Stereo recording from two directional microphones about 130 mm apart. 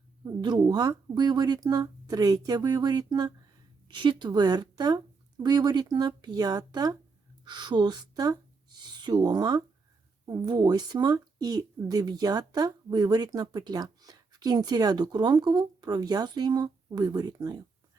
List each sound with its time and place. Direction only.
0.3 s speech: 30° right (ahead or behind)